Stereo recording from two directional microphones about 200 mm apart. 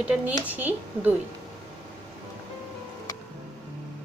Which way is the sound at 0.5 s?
10° right (ahead or behind).